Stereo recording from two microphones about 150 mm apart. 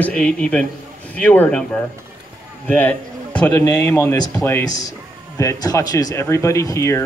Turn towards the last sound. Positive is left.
turn(degrees=20)  # may be behind; listen again after turning